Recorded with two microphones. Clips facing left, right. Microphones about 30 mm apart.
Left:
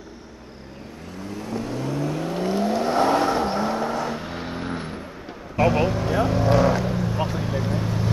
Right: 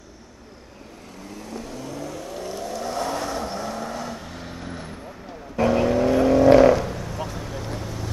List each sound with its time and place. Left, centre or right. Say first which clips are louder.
1.5 s vehicle: left 7 dB; left
5.6 s vehicle: even; centre
5.9 s vehicle: right 5 dB; centre
6.1 s vehicle: right 6 dB; centre